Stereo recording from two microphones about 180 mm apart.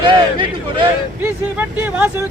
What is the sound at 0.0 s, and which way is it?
Speech, 25° right (ahead or behind).